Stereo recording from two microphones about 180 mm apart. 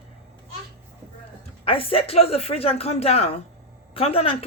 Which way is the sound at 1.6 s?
30° left (ahead or behind).